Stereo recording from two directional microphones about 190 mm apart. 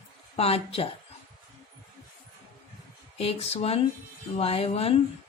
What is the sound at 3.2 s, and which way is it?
Speech, 30° left (ahead or behind).